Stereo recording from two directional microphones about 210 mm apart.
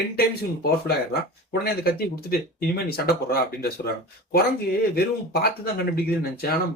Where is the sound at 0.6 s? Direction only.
50° left (ahead or behind).